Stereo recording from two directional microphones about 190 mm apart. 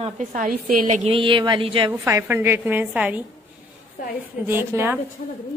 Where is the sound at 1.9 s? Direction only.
15° right (ahead or behind).